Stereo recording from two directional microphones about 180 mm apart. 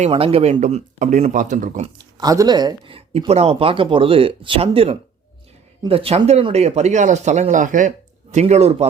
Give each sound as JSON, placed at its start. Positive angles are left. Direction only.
{"t": 0.0, "sound": "speech", "side_deg": -35}
{"t": 2.0, "sound": "speech", "side_deg": -20}